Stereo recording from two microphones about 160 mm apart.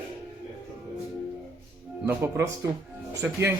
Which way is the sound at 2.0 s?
15° right (ahead or behind).